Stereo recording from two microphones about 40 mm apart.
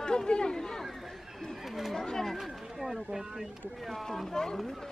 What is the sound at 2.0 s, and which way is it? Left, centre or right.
Speech, centre.